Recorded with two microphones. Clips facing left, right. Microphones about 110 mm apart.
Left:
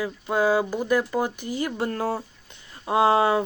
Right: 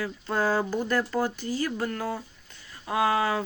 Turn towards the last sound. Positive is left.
turn(degrees=25)  # may be behind; listen again after turning